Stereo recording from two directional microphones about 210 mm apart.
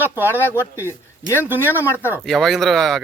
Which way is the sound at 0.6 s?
10° left (ahead or behind).